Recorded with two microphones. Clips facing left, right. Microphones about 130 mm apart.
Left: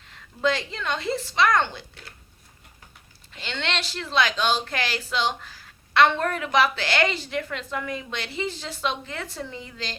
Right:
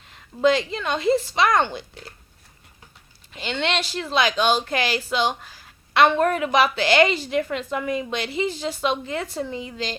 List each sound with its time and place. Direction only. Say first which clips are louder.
0.4 s a woman's voice: right 5 dB; 15° right (ahead or behind)
3.3 s a woman's voice: right 5 dB; 15° right (ahead or behind)